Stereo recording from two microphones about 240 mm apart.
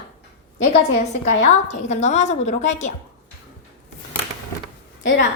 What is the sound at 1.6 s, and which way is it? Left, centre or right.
A woman's voice, left.